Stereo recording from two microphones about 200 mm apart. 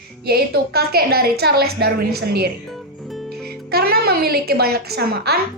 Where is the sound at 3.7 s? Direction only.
50° right (ahead or behind).